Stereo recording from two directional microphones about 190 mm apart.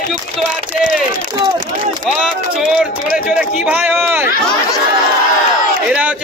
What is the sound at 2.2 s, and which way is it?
A man's voice, 5° right (ahead or behind).